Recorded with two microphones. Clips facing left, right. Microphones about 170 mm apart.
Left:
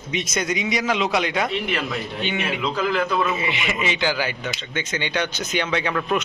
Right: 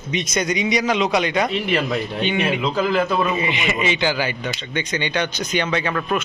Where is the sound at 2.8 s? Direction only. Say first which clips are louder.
Right 3 dB; 30° right (ahead or behind).